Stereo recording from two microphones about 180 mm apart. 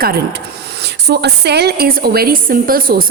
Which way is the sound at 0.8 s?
65° right (ahead or behind).